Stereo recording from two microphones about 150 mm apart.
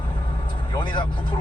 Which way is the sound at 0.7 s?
30° left (ahead or behind).